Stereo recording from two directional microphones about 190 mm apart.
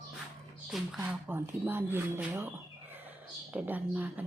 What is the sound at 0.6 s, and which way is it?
Speech, 5° right (ahead or behind).